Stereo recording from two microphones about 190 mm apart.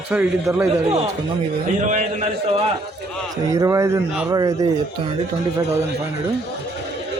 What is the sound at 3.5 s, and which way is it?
Speech, 15° right (ahead or behind).